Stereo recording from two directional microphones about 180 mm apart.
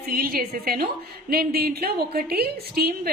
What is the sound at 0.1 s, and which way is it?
A woman's voice, 55° right (ahead or behind).